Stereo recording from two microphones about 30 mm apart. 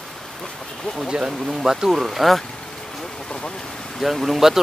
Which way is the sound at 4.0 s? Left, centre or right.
Centre.